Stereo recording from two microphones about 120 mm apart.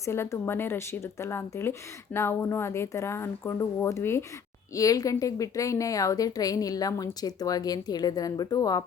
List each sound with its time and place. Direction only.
0.0 s a woman's voice: 25° left (ahead or behind)